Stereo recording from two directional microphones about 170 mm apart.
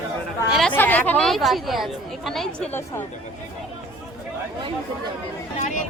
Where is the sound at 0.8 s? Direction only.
10° left (ahead or behind).